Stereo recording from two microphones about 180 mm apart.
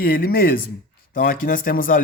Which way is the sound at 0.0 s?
55° left (ahead or behind).